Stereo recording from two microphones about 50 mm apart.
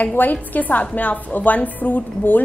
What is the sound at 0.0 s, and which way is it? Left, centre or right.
A woman's voice, left.